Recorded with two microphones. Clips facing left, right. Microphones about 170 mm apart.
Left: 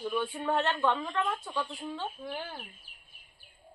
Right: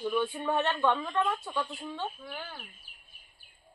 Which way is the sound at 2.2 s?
25° left (ahead or behind).